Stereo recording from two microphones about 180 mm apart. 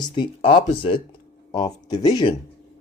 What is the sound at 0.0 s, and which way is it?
Speech, 25° left (ahead or behind).